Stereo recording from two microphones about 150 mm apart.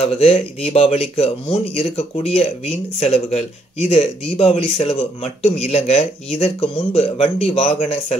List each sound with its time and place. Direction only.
0.0 s speech: 40° left (ahead or behind)